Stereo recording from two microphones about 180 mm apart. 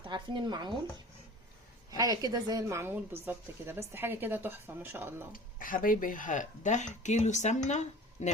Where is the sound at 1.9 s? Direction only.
20° right (ahead or behind).